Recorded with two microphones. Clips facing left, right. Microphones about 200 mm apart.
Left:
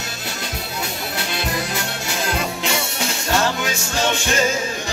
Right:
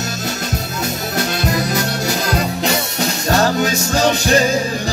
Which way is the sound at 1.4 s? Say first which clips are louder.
Right 5 dB; 40° right (ahead or behind).